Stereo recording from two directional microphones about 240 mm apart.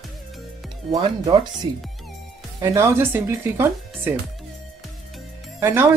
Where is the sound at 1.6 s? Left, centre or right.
Centre.